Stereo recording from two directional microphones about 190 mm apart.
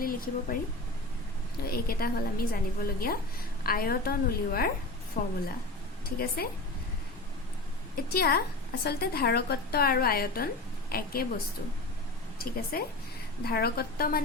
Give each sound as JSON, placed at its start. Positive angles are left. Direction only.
{"t": 0.0, "sound": "speech", "side_deg": 50}
{"t": 1.7, "sound": "a woman's voice", "side_deg": 50}
{"t": 8.1, "sound": "a woman's voice", "side_deg": 55}
{"t": 12.4, "sound": "a woman's voice", "side_deg": 50}